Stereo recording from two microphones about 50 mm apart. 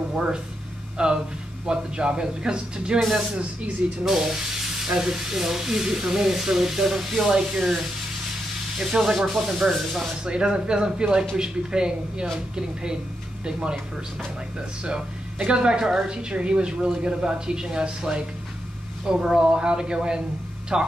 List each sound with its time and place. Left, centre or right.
0.1 s speech: centre
4.0 s speech: centre
10.2 s speech: centre
13.5 s speech: centre
14.9 s speech: centre